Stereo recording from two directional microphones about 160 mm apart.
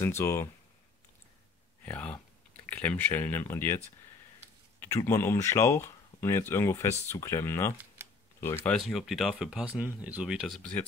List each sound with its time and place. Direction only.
0.0 s speech: 15° left (ahead or behind)
1.9 s speech: 10° left (ahead or behind)
4.8 s speech: 20° left (ahead or behind)
8.6 s speech: centre (ahead or behind)